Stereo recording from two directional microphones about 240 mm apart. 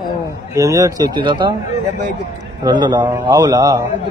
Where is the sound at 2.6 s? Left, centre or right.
Centre.